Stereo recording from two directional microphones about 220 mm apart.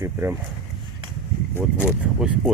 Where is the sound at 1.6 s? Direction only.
5° right (ahead or behind).